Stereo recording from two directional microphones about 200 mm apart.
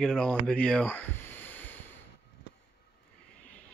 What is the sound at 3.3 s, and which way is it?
Vehicle, 5° left (ahead or behind).